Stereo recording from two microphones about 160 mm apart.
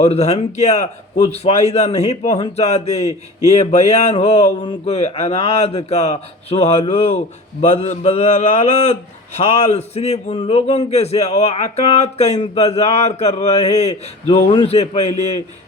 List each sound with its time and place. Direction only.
0.0 s a man's voice: 40° left (ahead or behind)